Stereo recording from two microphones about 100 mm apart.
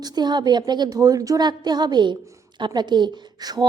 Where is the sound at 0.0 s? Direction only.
45° right (ahead or behind).